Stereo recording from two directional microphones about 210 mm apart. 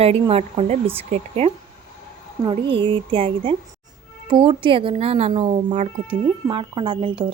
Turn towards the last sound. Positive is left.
turn(degrees=-25)  # may be behind; listen again after turning